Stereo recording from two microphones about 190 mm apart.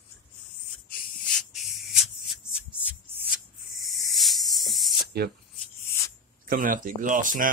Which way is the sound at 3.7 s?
Centre (ahead or behind).